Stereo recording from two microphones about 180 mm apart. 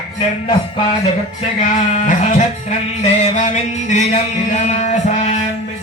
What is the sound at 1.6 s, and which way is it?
Speech, 45° left (ahead or behind).